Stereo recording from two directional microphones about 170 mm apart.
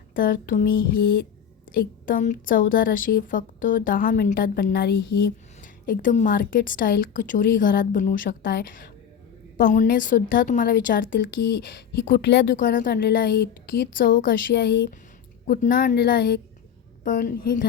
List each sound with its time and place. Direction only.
0.1 s a woman's voice: 55° left (ahead or behind)
1.7 s a woman's voice: 55° left (ahead or behind)
5.8 s a woman's voice: 55° left (ahead or behind)
11.9 s a woman's voice: 80° left
12.5 s a woman's voice: 55° left (ahead or behind); by 14.9 s 90° left
15.6 s a woman's voice: 50° left (ahead or behind)